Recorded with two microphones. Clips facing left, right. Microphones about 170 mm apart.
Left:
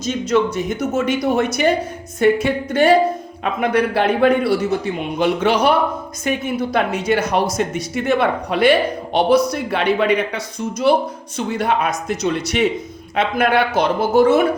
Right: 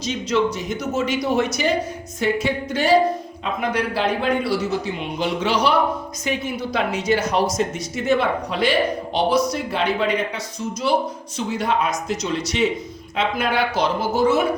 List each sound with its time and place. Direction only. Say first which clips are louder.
0.0 s speech: left 3 dB; 50° left (ahead or behind)